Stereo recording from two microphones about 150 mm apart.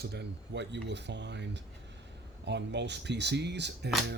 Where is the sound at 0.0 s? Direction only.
90° right.